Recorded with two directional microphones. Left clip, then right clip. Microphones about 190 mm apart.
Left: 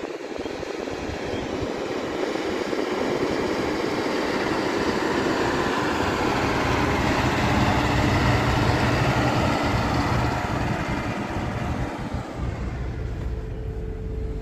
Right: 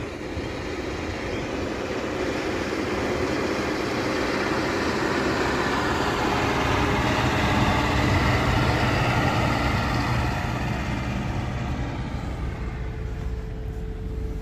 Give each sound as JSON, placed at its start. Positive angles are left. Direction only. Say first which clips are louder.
{"t": 1.3, "sound": "vehicle", "louder": "left 2 dB", "side_deg": 35}